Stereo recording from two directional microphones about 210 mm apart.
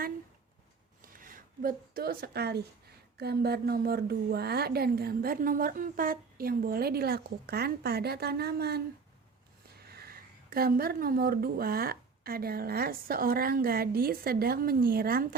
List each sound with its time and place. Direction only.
1.0 s a woman's voice: 40° right (ahead or behind)
9.8 s a woman's voice: 50° right (ahead or behind)